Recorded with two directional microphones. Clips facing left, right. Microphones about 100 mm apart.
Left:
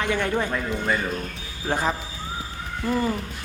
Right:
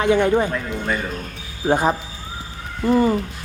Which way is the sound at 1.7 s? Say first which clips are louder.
Right 6 dB; 20° right (ahead or behind).